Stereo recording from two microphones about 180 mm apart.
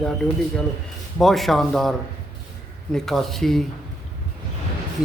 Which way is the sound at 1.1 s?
Centre (ahead or behind).